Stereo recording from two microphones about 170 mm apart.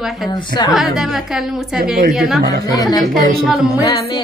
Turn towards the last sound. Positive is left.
turn(degrees=25)  # may be behind; listen again after turning